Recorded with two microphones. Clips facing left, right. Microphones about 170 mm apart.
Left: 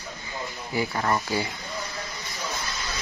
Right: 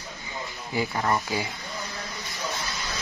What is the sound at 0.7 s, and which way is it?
Speech, 20° right (ahead or behind).